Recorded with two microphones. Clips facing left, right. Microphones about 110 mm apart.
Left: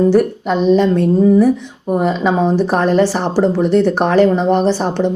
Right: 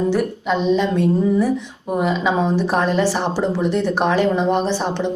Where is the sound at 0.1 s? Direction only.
45° left (ahead or behind).